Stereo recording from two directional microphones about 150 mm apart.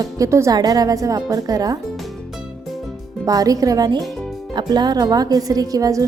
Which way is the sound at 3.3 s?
25° right (ahead or behind).